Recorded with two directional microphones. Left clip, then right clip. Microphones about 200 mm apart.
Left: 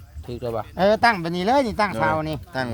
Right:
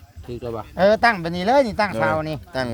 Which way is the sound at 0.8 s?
20° right (ahead or behind).